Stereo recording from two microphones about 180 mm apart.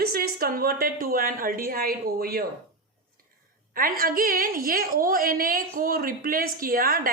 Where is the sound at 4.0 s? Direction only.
55° right (ahead or behind).